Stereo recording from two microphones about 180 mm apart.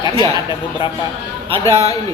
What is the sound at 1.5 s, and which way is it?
Speech, 35° right (ahead or behind).